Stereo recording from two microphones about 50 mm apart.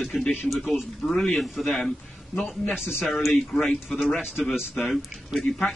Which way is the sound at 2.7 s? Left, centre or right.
Centre.